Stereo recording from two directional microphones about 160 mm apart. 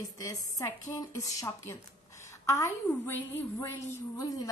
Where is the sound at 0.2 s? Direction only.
20° left (ahead or behind).